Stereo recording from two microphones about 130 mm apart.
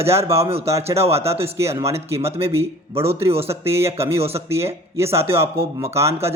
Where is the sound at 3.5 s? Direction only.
20° right (ahead or behind).